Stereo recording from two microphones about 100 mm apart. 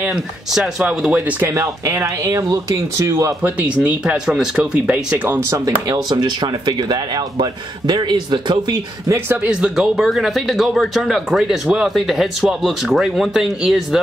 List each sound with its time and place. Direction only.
0.0 s speech: 5° right (ahead or behind)
1.5 s speech: 30° right (ahead or behind)
3.4 s speech: 10° right (ahead or behind)
5.5 s speech: 40° right (ahead or behind)
9.4 s speech: 10° right (ahead or behind)